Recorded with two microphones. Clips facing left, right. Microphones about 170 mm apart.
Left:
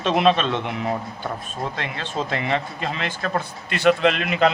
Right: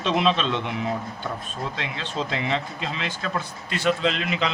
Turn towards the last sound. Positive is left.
turn(degrees=55)  # may be behind; listen again after turning